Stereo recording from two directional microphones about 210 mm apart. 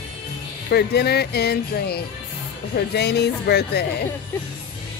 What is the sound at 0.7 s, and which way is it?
Speech, 50° left (ahead or behind).